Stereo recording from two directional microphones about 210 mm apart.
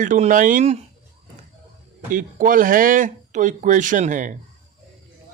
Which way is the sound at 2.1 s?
40° right (ahead or behind).